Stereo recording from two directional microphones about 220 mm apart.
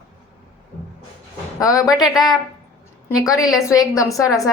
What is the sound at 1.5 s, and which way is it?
Speech, 15° left (ahead or behind).